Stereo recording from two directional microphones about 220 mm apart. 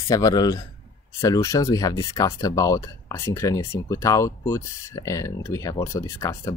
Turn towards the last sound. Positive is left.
turn(degrees=15)  # may be behind; listen again after turning